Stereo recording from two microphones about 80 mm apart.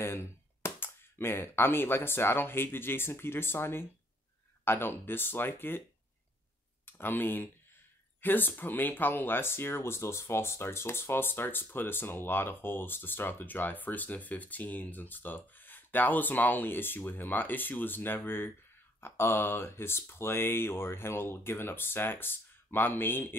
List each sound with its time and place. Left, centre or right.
0.0 s speech: left
6.9 s speech: left